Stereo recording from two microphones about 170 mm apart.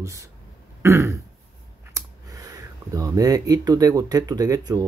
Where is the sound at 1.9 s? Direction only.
20° right (ahead or behind).